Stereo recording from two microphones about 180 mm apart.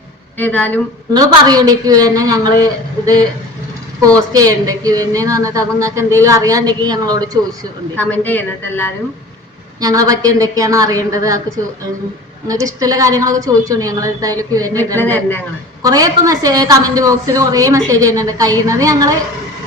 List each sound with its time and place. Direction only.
0.3 s speech: 10° left (ahead or behind)
1.1 s a woman's voice: 20° right (ahead or behind)
4.3 s a woman's voice: 20° right (ahead or behind)
7.9 s speech: 10° left (ahead or behind)
9.8 s a woman's voice: 20° right (ahead or behind)
12.5 s a woman's voice: 20° right (ahead or behind)
14.9 s speech: 10° left (ahead or behind)
15.8 s a woman's voice: 20° right (ahead or behind)